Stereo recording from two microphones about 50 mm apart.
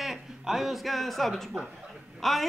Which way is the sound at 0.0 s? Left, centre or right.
Centre.